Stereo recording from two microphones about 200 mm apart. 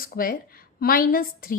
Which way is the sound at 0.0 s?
45° left (ahead or behind).